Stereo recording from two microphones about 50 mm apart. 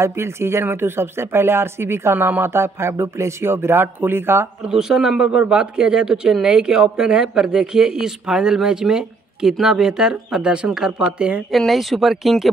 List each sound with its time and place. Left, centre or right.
0.0 s speech: right
4.6 s speech: centre
11.5 s speech: centre